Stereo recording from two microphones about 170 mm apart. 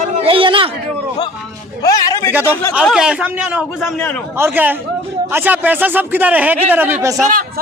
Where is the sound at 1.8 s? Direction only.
20° left (ahead or behind).